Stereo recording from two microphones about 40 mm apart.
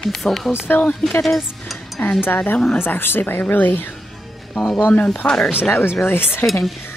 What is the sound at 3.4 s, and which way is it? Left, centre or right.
Speech, left.